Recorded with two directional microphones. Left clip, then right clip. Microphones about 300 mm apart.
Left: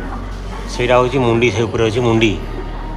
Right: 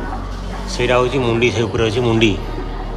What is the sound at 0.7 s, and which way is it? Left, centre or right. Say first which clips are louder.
Speech: left 2 dB; centre.